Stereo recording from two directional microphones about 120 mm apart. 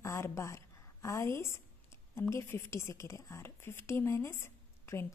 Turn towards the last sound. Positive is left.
turn(degrees=20)  # may be behind; listen again after turning